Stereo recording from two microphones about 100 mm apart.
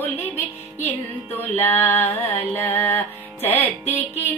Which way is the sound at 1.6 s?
20° left (ahead or behind).